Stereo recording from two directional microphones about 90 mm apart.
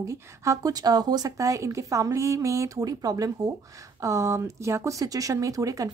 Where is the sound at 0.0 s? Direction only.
35° right (ahead or behind).